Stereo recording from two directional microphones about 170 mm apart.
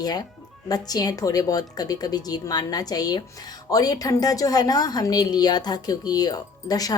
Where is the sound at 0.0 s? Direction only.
25° left (ahead or behind).